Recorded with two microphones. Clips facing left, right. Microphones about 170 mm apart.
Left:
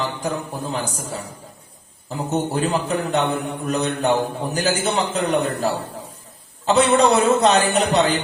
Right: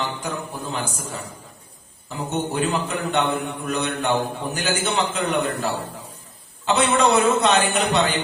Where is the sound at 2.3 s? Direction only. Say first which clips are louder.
Left 2 dB; 40° left (ahead or behind).